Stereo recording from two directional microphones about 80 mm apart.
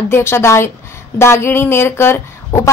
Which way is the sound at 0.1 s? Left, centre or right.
Left.